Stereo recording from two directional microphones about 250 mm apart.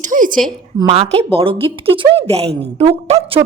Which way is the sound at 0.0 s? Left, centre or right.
Right.